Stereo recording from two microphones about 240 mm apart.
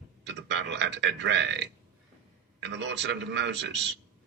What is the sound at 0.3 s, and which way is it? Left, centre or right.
A man's voice, right.